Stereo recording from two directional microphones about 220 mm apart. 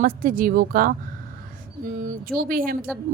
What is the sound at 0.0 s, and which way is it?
Speech, 40° right (ahead or behind).